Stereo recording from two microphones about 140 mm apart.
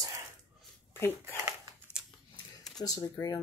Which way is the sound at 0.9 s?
15° left (ahead or behind).